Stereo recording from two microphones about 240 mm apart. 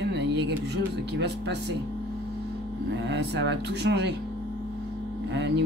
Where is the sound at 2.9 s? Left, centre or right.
Right.